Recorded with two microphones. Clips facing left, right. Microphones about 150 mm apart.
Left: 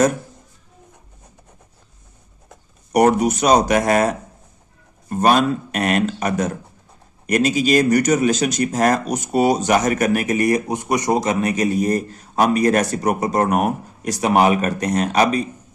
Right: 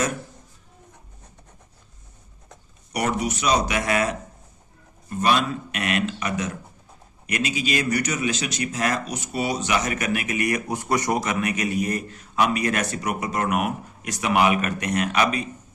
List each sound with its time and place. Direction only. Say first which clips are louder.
2.9 s speech: left 10 dB; 45° left (ahead or behind)
10.7 s a man's voice: left 4 dB; 20° left (ahead or behind); by 15.4 s 35° left (ahead or behind)